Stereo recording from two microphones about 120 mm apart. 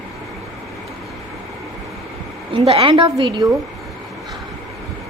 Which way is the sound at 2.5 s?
55° right (ahead or behind).